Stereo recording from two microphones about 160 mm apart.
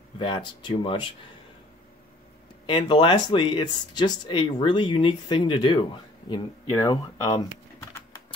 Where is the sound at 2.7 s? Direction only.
30° left (ahead or behind).